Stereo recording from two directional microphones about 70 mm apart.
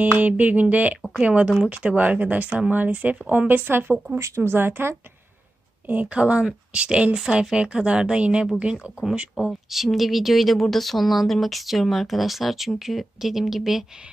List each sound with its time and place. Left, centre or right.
0.2 s speech: right
5.9 s a woman's voice: right
9.5 s speech: centre